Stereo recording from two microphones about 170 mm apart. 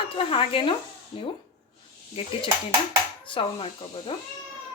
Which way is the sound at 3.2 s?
30° left (ahead or behind).